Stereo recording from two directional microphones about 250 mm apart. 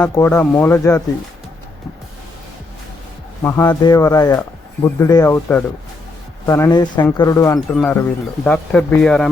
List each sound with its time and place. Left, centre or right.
0.0 s speech: centre
3.4 s speech: centre